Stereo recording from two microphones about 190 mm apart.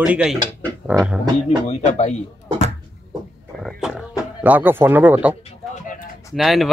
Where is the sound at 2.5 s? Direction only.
35° right (ahead or behind).